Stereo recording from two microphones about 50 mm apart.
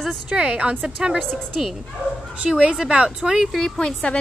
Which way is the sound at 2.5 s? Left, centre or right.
Centre.